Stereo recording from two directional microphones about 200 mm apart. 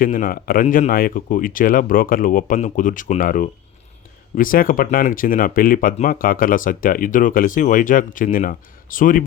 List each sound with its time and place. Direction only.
0.0 s speech: 45° left (ahead or behind)